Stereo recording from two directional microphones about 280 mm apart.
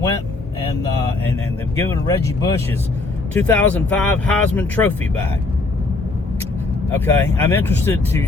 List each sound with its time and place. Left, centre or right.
1.8 s speech: centre
6.9 s speech: centre